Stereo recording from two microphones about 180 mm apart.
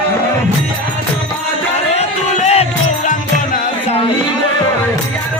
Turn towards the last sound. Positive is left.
turn(degrees=35)  # may be behind; listen again after turning